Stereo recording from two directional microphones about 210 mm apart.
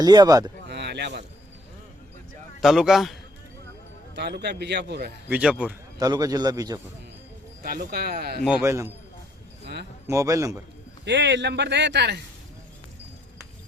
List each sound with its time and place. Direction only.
0.0 s speech: 20° right (ahead or behind)
0.7 s basketball bounce: 55° right (ahead or behind)
2.6 s speech: centre (ahead or behind)
4.1 s a man's voice: 55° right (ahead or behind)
5.3 s speech: 5° right (ahead or behind)
6.0 s a man's voice: 15° right (ahead or behind)
7.6 s a man's voice: 45° right (ahead or behind)
8.6 s a man's voice: 15° right (ahead or behind)
10.1 s a man's voice: 15° right (ahead or behind)
11.0 s speech: 55° right (ahead or behind)